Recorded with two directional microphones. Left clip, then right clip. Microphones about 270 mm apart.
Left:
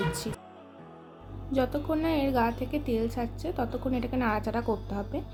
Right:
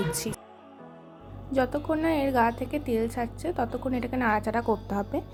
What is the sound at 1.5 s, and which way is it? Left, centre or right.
A woman's voice, centre.